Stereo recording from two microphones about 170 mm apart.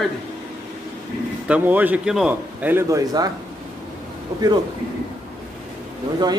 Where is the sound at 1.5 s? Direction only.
10° right (ahead or behind).